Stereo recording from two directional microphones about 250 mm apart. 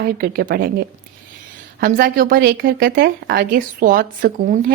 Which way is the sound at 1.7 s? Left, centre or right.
Right.